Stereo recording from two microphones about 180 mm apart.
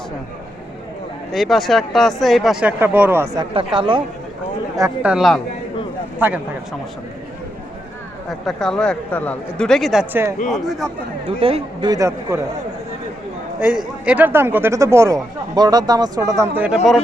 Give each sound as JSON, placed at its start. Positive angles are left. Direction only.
{"t": 1.3, "sound": "speech", "side_deg": 0}
{"t": 3.3, "sound": "speech", "side_deg": -30}
{"t": 5.0, "sound": "speech", "side_deg": 0}
{"t": 8.3, "sound": "speech", "side_deg": 0}
{"t": 10.5, "sound": "speech", "side_deg": 0}
{"t": 11.3, "sound": "speech", "side_deg": -30}
{"t": 13.6, "sound": "speech", "side_deg": -5}